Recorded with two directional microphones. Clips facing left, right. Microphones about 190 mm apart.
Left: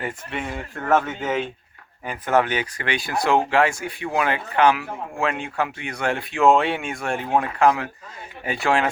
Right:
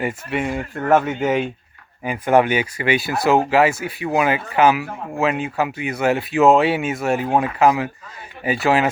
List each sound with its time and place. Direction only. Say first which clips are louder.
0.0 s speech: right 6 dB; 10° right (ahead or behind)